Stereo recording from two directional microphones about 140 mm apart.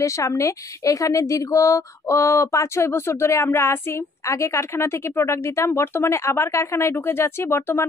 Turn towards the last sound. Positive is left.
turn(degrees=15)  # may be behind; listen again after turning